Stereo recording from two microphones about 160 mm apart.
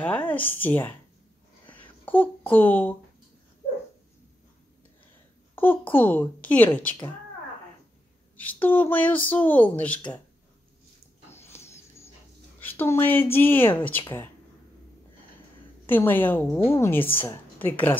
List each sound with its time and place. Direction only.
0.0 s speech: 10° left (ahead or behind)
2.0 s speech: 10° left (ahead or behind)
5.6 s speech: 10° left (ahead or behind)
8.4 s speech: 10° left (ahead or behind)
11.2 s a sound: 15° left (ahead or behind)
12.5 s speech: 10° left (ahead or behind)
15.9 s a woman's voice: 10° left (ahead or behind)